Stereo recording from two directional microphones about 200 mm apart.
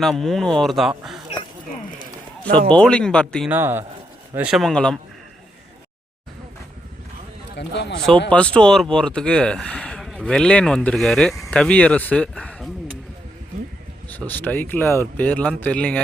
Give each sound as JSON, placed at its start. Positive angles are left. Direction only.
{"t": 0.0, "sound": "speech", "side_deg": 0}
{"t": 2.6, "sound": "speech", "side_deg": 5}
{"t": 3.5, "sound": "a man's voice", "side_deg": -10}
{"t": 7.5, "sound": "a man's voice", "side_deg": 60}
{"t": 8.3, "sound": "speech", "side_deg": 5}
{"t": 14.1, "sound": "speech", "side_deg": 10}